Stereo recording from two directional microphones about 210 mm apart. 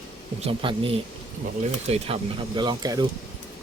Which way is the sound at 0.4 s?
25° right (ahead or behind).